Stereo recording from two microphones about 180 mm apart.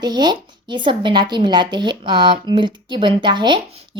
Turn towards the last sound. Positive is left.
turn(degrees=-25)  # may be behind; listen again after turning